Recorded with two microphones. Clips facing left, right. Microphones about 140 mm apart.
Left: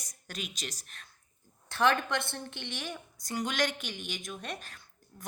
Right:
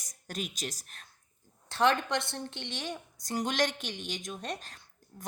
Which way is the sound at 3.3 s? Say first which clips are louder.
Right 1 dB; 40° right (ahead or behind).